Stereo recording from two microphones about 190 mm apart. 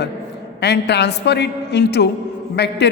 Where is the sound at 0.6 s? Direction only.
60° left (ahead or behind).